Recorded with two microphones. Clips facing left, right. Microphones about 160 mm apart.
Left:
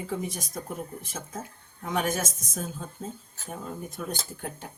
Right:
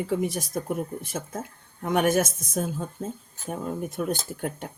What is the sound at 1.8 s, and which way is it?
Speech, 60° right (ahead or behind).